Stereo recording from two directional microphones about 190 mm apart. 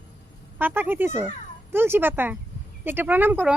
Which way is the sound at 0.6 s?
10° right (ahead or behind).